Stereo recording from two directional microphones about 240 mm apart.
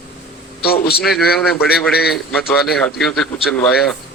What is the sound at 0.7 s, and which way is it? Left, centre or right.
Speech, left.